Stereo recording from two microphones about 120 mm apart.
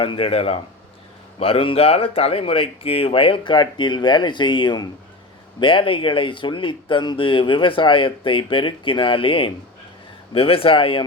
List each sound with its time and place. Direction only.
0.0 s speech: 50° left (ahead or behind)